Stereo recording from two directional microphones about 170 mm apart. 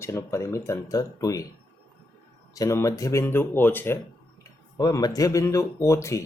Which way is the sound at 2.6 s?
20° left (ahead or behind).